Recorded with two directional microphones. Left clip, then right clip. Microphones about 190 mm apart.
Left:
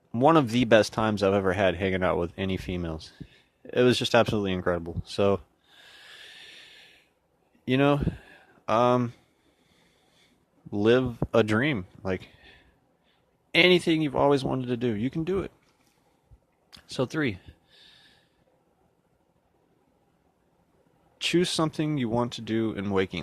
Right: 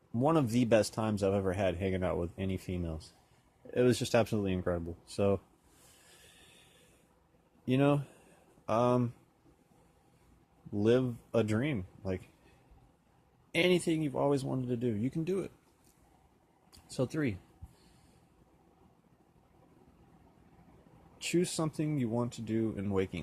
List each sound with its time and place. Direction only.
0.1 s speech: 35° left (ahead or behind)
7.6 s speech: 35° left (ahead or behind)
10.8 s speech: 35° left (ahead or behind)
13.5 s speech: 35° left (ahead or behind)
16.7 s speech: 35° left (ahead or behind)
21.2 s speech: 35° left (ahead or behind)